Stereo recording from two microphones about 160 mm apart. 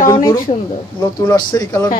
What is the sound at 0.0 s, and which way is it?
Speech, 20° left (ahead or behind).